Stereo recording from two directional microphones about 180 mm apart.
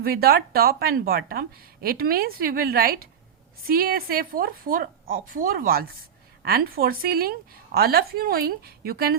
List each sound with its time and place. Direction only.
0.0 s a woman's voice: 60° right (ahead or behind)